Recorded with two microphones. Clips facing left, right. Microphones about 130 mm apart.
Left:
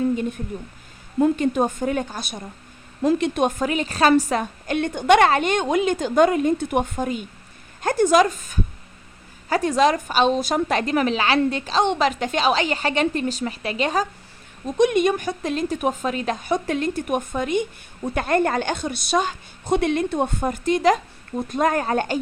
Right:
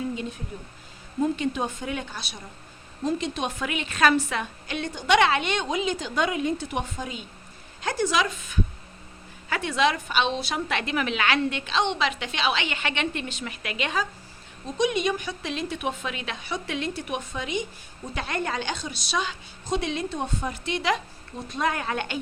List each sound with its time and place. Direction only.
1.2 s a woman's voice: 50° left (ahead or behind)
3.0 s a woman's voice: 65° left (ahead or behind); by 14.1 s 40° left (ahead or behind)
14.8 s a woman's voice: 50° left (ahead or behind)